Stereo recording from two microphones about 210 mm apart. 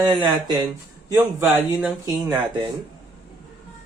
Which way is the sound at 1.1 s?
10° right (ahead or behind).